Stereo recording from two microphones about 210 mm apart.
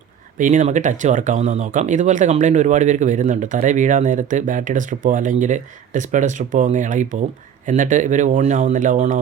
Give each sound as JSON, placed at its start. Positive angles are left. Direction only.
{"t": 0.3, "sound": "speech", "side_deg": -35}